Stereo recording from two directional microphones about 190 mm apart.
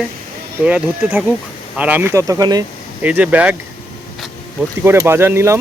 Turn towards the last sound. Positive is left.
turn(degrees=-15)  # may be behind; listen again after turning